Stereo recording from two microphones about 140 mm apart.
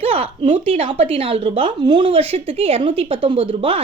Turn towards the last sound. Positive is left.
turn(degrees=-40)  # may be behind; listen again after turning